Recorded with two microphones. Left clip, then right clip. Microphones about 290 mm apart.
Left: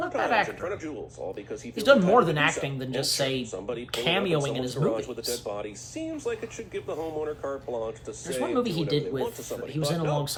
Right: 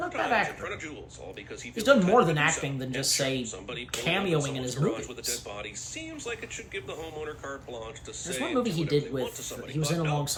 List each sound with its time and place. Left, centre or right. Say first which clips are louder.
0.1 s speech: left 2 dB; centre
8.5 s speech: right 1 dB; centre
9.5 s speech: left 3 dB; centre